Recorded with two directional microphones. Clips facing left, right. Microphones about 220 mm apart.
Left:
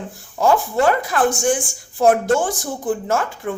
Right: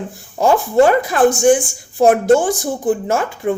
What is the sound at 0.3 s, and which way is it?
A woman's voice, 15° right (ahead or behind).